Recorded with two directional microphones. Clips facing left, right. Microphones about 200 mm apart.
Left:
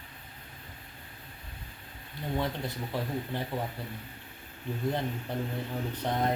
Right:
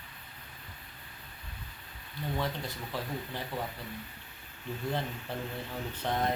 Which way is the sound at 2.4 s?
20° left (ahead or behind).